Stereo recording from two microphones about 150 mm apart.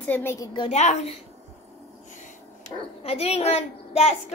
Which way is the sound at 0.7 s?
50° left (ahead or behind).